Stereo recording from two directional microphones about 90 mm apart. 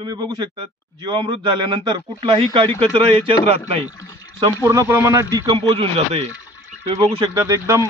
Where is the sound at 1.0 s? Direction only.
60° right (ahead or behind).